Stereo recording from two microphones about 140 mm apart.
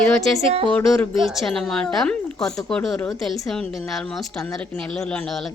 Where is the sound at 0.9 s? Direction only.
Centre (ahead or behind).